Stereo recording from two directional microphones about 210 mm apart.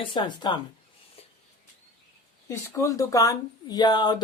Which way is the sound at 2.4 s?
15° left (ahead or behind).